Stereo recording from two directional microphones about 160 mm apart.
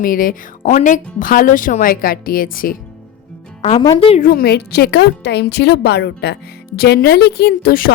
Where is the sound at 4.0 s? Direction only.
35° left (ahead or behind).